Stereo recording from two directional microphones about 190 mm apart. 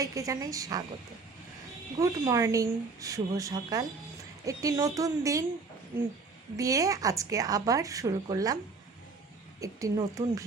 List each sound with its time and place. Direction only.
0.0 s a woman's voice: 15° right (ahead or behind)
2.0 s a woman's voice: 15° right (ahead or behind)
6.6 s a woman's voice: 15° right (ahead or behind)
9.6 s a woman's voice: 15° right (ahead or behind)